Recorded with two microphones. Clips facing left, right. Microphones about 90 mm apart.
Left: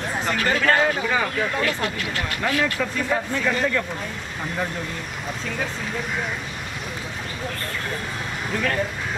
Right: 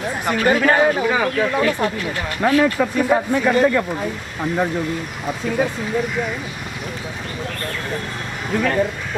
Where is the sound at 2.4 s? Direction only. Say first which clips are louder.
Right 8 dB; 20° right (ahead or behind).